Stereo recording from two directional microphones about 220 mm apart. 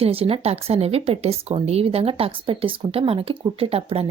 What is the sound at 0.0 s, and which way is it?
A woman's voice, 25° right (ahead or behind).